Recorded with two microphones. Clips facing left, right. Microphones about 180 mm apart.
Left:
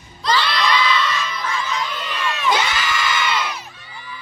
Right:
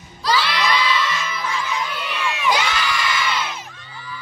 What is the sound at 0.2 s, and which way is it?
Crowd, 5° right (ahead or behind).